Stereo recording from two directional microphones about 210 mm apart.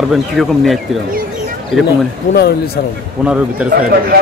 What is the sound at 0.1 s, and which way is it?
Speech, centre (ahead or behind).